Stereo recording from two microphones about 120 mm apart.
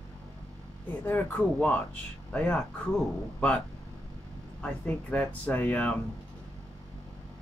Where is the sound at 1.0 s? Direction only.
15° left (ahead or behind).